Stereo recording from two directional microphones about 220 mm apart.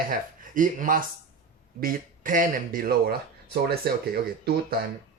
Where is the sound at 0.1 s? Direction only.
35° right (ahead or behind).